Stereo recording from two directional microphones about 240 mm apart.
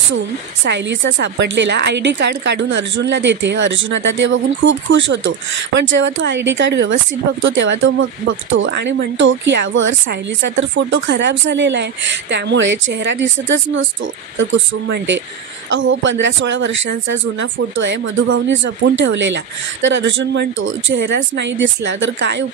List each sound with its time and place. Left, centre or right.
0.7 s speech: right